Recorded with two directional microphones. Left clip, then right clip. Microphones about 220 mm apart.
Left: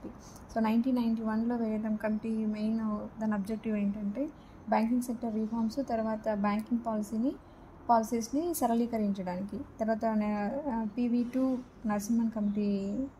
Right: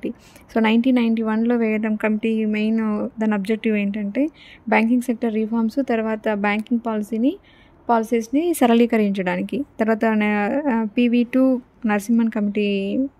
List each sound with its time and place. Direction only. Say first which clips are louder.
0.5 s a woman's voice: right 12 dB; 40° right (ahead or behind)